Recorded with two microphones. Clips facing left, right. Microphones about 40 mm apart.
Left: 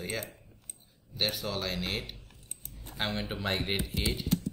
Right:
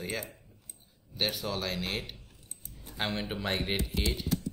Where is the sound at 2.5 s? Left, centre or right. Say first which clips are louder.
Left 1 dB; left.